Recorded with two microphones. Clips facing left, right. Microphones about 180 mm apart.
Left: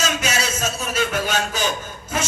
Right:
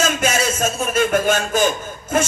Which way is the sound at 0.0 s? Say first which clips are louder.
Right 4 dB; 50° right (ahead or behind).